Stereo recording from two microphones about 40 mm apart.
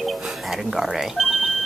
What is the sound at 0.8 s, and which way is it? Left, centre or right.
Speech, centre.